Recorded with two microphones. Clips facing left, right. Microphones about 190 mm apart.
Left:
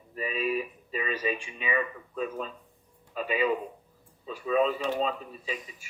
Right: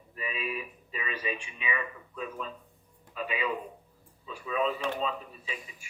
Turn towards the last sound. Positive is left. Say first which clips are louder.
# left 5 dB
turn(degrees=40)  # may be behind; listen again after turning